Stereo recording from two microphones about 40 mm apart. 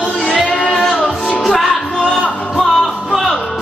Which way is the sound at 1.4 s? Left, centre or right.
Centre.